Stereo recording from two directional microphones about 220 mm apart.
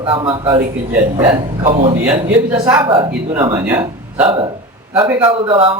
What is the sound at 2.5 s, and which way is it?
A woman's voice, 10° right (ahead or behind).